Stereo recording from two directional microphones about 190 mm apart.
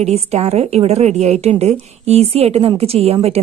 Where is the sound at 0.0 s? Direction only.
35° right (ahead or behind).